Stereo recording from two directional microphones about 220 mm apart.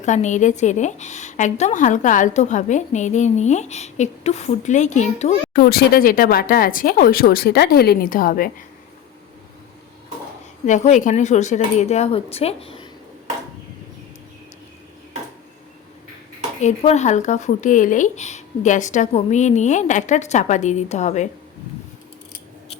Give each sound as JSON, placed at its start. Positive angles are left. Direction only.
{"t": 0.0, "sound": "a woman's voice", "side_deg": 35}
{"t": 10.7, "sound": "a woman's voice", "side_deg": 30}
{"t": 16.6, "sound": "a woman's voice", "side_deg": 30}